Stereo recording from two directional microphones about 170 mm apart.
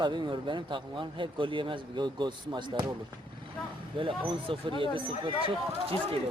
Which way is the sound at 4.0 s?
30° right (ahead or behind).